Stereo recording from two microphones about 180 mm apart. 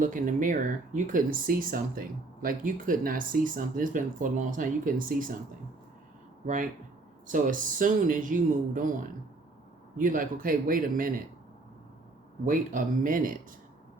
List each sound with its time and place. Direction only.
0.0 s speech: 50° right (ahead or behind)
6.4 s speech: 45° right (ahead or behind)
10.0 s speech: 50° right (ahead or behind)
12.5 s speech: 50° right (ahead or behind)